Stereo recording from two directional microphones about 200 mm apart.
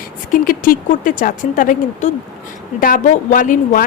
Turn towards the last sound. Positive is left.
turn(degrees=45)  # may be behind; listen again after turning